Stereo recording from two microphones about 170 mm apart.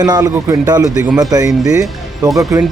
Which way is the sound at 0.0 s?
20° right (ahead or behind).